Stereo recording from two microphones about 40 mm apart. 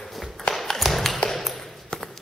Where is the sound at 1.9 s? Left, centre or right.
Centre.